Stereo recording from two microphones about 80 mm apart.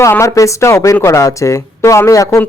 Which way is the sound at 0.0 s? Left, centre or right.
Left.